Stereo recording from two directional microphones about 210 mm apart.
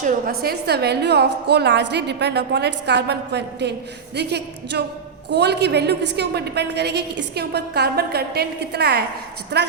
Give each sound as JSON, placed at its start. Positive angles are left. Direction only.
{"t": 0.0, "sound": "a woman's voice", "side_deg": -45}